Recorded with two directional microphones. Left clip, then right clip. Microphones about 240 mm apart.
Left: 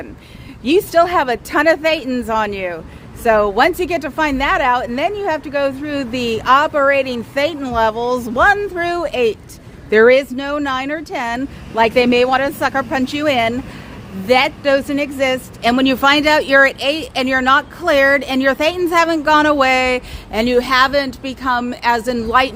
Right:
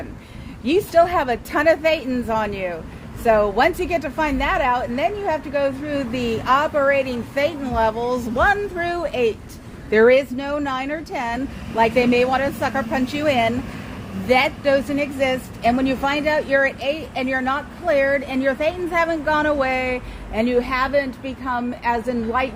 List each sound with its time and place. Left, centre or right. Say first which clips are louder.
0.6 s speech: left 3 dB; left